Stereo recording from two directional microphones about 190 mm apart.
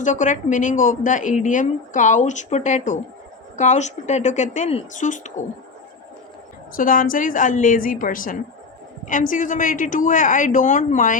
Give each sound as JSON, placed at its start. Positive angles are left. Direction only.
{"t": 0.0, "sound": "a woman's voice", "side_deg": 40}
{"t": 6.7, "sound": "a woman's voice", "side_deg": 45}